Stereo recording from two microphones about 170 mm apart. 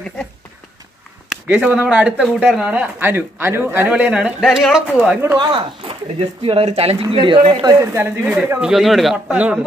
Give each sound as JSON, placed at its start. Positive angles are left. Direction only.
{"t": 1.3, "sound": "speech", "side_deg": -10}
{"t": 5.4, "sound": "speech", "side_deg": -30}